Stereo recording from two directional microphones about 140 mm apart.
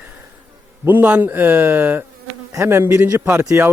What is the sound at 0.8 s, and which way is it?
A man's voice, 15° right (ahead or behind).